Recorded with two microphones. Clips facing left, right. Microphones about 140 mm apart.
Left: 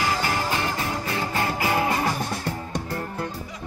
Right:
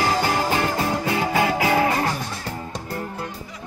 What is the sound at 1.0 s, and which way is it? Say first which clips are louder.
Music: right 5 dB; 90° right.